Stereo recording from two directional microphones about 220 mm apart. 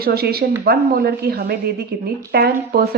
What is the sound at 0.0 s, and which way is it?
A woman's voice, 45° right (ahead or behind).